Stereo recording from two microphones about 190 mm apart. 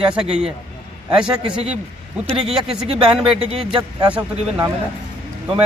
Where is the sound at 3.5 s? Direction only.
25° right (ahead or behind).